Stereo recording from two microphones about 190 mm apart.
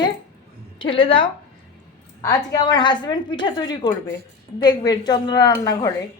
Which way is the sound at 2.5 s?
20° left (ahead or behind).